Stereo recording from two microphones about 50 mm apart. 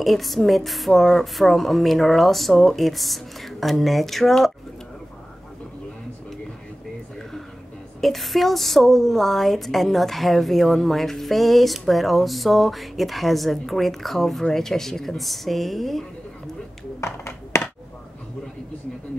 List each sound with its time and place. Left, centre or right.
0.0 s a woman's voice: centre
8.0 s a woman's voice: centre
17.0 s a sound: left